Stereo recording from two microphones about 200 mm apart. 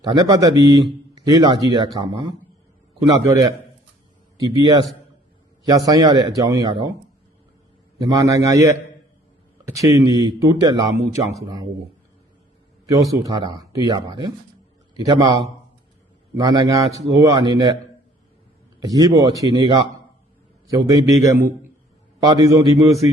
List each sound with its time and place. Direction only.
0.0 s speech: 20° right (ahead or behind)
4.6 s speech: 20° right (ahead or behind)
7.9 s speech: 15° right (ahead or behind)
12.8 s a man's voice: 15° right (ahead or behind)
18.8 s speech: 15° right (ahead or behind)